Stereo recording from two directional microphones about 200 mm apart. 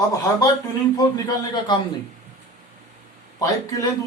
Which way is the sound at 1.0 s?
20° left (ahead or behind).